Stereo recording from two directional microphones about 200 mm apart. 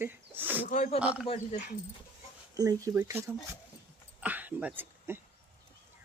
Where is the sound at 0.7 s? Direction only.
35° left (ahead or behind).